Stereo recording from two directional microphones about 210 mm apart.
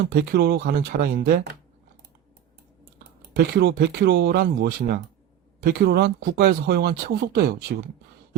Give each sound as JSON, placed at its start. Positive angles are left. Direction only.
{"t": 0.1, "sound": "speech", "side_deg": -50}
{"t": 3.3, "sound": "speech", "side_deg": -50}